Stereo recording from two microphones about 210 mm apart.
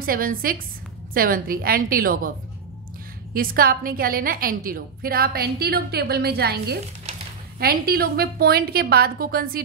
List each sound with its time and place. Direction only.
0.0 s a woman's voice: 45° right (ahead or behind)
3.3 s a woman's voice: 45° right (ahead or behind)